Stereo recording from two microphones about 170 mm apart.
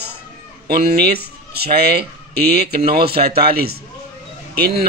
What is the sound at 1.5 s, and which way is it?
A man's voice, 70° right (ahead or behind).